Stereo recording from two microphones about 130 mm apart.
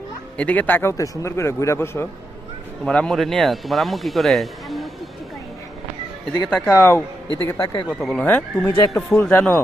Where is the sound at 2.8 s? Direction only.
5° left (ahead or behind).